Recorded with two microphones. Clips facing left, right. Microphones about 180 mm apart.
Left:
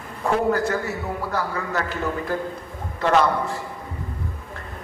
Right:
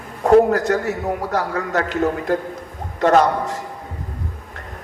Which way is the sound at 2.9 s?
45° right (ahead or behind).